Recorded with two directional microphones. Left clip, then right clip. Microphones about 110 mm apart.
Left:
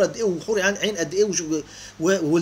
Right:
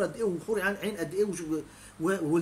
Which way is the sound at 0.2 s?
5° left (ahead or behind).